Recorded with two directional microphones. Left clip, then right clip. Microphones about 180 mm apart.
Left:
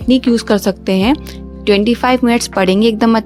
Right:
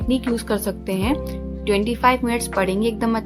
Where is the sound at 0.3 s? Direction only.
40° left (ahead or behind).